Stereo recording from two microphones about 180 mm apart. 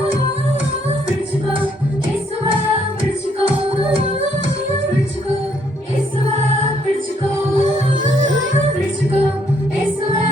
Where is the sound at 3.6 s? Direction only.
30° right (ahead or behind).